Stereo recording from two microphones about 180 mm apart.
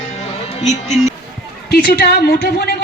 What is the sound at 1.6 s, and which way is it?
A woman's voice, 60° left (ahead or behind).